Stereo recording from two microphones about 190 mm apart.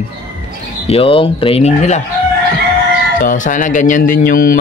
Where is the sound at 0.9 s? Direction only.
30° left (ahead or behind).